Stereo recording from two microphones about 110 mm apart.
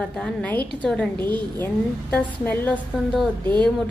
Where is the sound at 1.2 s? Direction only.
40° right (ahead or behind).